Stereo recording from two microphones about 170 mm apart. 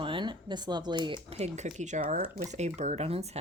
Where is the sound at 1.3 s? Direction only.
40° right (ahead or behind).